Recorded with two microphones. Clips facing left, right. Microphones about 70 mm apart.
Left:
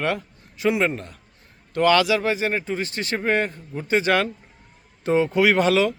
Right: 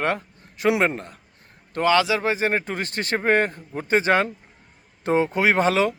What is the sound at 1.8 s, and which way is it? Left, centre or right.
Speech, right.